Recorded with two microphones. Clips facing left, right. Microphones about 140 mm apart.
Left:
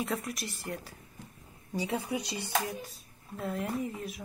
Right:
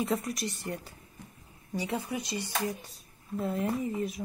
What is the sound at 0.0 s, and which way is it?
Speech, centre (ahead or behind).